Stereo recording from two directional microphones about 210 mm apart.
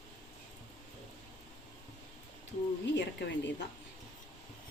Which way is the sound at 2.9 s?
55° left (ahead or behind).